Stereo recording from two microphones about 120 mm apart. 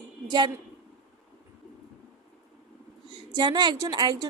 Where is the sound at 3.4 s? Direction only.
40° right (ahead or behind).